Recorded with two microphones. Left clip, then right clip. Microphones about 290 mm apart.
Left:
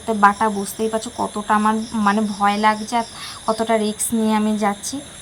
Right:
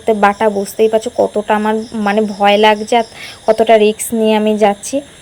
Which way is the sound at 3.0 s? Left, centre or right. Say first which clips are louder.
Right 7 dB; left.